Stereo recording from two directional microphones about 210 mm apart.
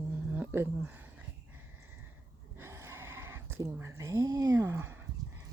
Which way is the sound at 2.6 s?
10° right (ahead or behind).